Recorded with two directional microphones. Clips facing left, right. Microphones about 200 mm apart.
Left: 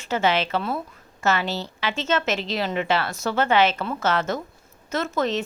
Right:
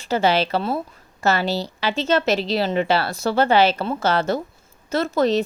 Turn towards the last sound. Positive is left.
turn(degrees=-35)  # may be behind; listen again after turning